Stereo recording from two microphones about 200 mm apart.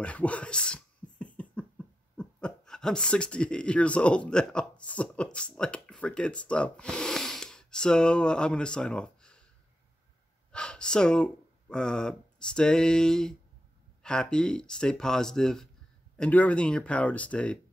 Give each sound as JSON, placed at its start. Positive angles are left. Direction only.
{"t": 0.0, "sound": "a sound", "side_deg": 5}
{"t": 2.1, "sound": "speech", "side_deg": 5}
{"t": 10.5, "sound": "gasp", "side_deg": 5}
{"t": 11.7, "sound": "speech", "side_deg": 5}